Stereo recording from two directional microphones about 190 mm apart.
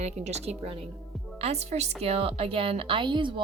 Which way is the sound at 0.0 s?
35° right (ahead or behind).